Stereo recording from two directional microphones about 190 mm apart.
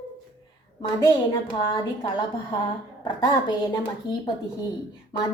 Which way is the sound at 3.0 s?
20° left (ahead or behind).